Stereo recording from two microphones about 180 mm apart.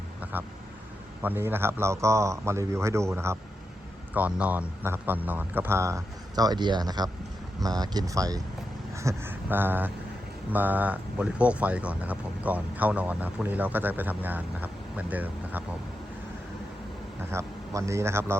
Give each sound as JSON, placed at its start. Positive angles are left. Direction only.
{"t": 0.2, "sound": "a sound", "side_deg": -10}
{"t": 1.2, "sound": "speech", "side_deg": -10}
{"t": 17.3, "sound": "speech", "side_deg": -15}